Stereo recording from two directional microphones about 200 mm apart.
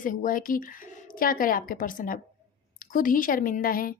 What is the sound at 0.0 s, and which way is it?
A woman's voice, 40° left (ahead or behind).